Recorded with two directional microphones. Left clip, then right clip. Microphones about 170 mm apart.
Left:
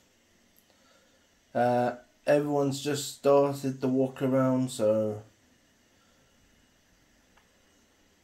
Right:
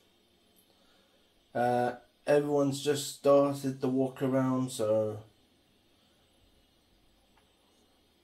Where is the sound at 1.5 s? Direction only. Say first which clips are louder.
Left 3 dB; 50° left (ahead or behind).